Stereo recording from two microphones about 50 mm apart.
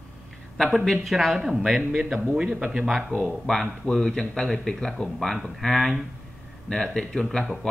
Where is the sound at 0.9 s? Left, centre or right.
Centre.